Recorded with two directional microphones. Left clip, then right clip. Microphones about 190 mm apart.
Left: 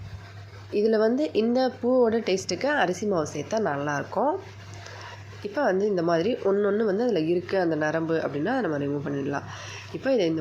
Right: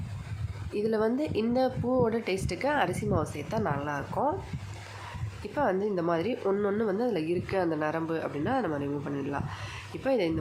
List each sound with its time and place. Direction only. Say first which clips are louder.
0.7 s a woman's voice: left 6 dB; 15° left (ahead or behind)
5.5 s a woman's voice: left 4 dB; 10° left (ahead or behind)